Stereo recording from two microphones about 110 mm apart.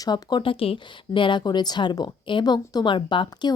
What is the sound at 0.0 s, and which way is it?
Speech, 40° left (ahead or behind).